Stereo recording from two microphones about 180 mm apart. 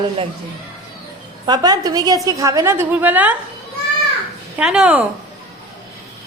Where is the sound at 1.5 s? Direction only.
20° right (ahead or behind).